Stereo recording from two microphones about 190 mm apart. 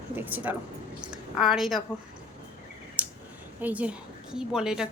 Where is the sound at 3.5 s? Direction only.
10° right (ahead or behind).